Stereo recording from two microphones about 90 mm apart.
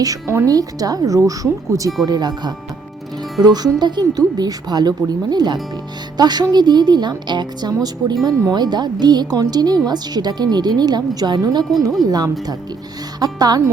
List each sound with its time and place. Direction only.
0.0 s speech: 35° right (ahead or behind)
2.0 s speech: 50° right (ahead or behind)